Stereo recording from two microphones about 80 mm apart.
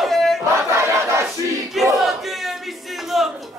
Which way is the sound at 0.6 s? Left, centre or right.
Right.